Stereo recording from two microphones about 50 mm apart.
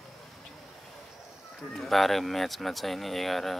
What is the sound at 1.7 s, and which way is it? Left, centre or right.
Speech, centre.